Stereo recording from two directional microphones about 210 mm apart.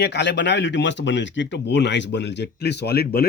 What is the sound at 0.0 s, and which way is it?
Speech, 55° left (ahead or behind).